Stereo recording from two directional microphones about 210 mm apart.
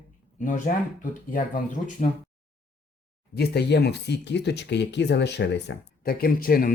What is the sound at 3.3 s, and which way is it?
Speech, 50° left (ahead or behind).